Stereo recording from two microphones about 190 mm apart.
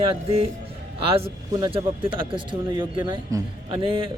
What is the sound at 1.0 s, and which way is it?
Speech, 30° right (ahead or behind).